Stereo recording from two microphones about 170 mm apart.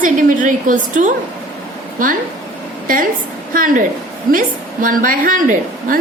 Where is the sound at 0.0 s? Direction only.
50° right (ahead or behind).